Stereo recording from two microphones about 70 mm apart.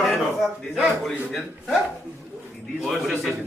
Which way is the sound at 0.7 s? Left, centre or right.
Centre.